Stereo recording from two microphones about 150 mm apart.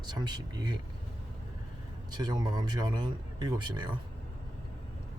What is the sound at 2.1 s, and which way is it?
Speech, 25° right (ahead or behind).